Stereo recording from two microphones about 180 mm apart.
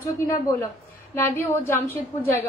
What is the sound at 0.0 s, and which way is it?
A woman's voice, 15° left (ahead or behind).